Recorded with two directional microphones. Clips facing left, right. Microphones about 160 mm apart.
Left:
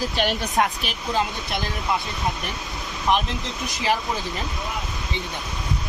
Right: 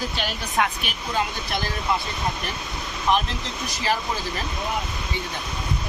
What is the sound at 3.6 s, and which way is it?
Speech, 20° left (ahead or behind).